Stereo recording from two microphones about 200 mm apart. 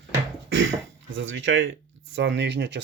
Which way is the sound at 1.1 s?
70° right (ahead or behind).